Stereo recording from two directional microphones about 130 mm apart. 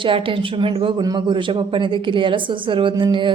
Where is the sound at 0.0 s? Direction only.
40° right (ahead or behind).